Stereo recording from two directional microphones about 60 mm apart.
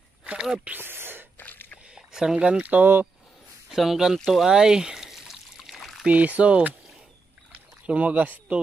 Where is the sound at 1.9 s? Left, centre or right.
Centre.